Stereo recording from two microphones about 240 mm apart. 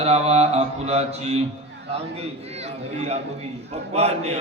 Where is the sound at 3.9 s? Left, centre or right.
Right.